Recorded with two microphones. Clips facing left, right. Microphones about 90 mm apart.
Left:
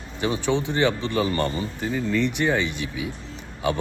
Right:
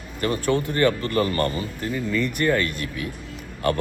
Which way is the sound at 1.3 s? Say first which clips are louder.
Right 1 dB; 5° right (ahead or behind).